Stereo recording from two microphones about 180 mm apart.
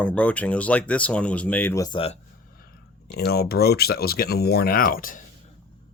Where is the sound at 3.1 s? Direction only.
60° left (ahead or behind).